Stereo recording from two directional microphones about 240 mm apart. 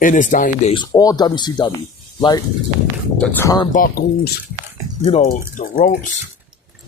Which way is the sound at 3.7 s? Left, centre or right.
Left.